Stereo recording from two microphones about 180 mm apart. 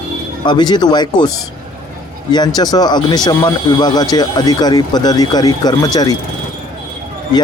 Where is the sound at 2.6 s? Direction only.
20° left (ahead or behind).